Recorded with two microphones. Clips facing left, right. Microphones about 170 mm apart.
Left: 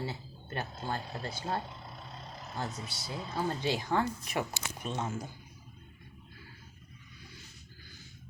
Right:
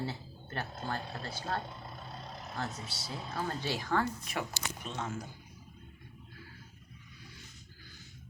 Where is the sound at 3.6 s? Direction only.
20° left (ahead or behind).